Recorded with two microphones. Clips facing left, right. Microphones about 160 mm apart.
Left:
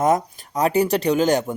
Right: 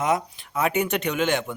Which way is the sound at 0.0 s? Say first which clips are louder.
Left 5 dB; 45° left (ahead or behind).